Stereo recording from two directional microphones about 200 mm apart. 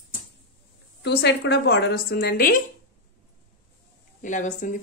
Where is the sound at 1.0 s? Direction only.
60° left (ahead or behind).